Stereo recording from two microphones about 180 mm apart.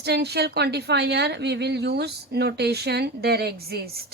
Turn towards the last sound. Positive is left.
turn(degrees=-60)  # may be behind; listen again after turning